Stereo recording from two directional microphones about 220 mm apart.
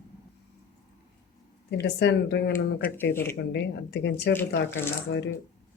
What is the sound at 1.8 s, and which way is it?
Speech, 50° left (ahead or behind).